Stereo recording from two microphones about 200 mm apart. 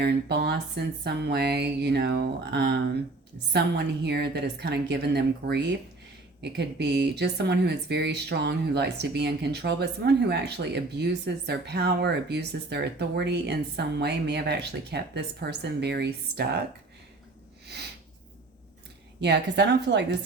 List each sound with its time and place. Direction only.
0.0 s speech: 55° right (ahead or behind)
19.2 s speech: 55° right (ahead or behind)